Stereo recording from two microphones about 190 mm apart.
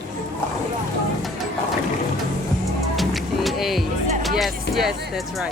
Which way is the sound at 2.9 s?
Centre (ahead or behind).